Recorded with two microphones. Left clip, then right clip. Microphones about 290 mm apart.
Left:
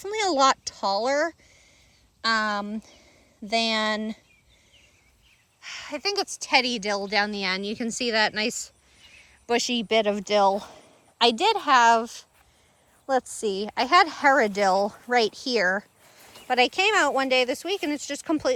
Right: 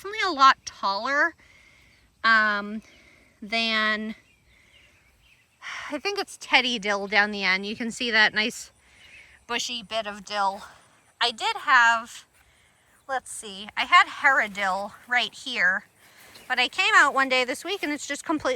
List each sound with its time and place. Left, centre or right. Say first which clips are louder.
0.0 s a woman's voice: right 2 dB; centre
5.5 s speech: right 2 dB; centre
9.6 s a woman's voice: left 7 dB; left